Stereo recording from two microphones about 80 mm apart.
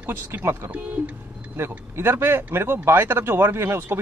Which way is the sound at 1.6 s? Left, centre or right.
Right.